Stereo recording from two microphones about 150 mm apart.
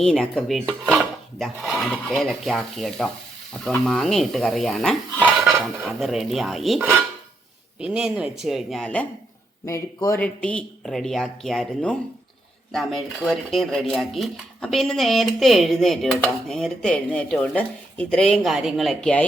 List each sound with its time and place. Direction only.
0.0 s speech: 5° left (ahead or behind)
9.6 s speech: 20° left (ahead or behind)
10.2 s speech: 10° left (ahead or behind)